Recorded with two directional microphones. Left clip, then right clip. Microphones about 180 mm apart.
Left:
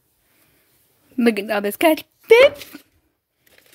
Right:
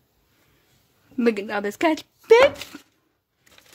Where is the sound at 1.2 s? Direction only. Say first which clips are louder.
Left 4 dB; 20° left (ahead or behind).